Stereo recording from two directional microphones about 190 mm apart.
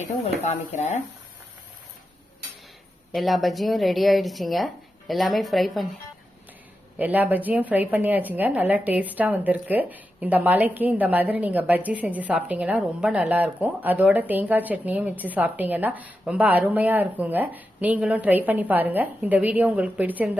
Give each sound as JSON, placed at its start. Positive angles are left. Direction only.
{"t": 0.4, "sound": "speech", "side_deg": 40}
{"t": 3.1, "sound": "speech", "side_deg": 0}
{"t": 7.0, "sound": "a woman's voice", "side_deg": -10}